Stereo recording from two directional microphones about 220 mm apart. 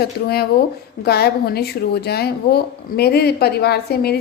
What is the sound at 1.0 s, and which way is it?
Speech, 45° left (ahead or behind).